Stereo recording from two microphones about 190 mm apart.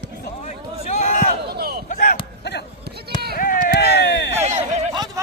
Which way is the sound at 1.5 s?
55° right (ahead or behind).